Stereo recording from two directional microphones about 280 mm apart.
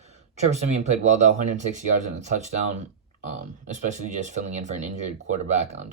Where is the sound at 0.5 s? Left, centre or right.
Right.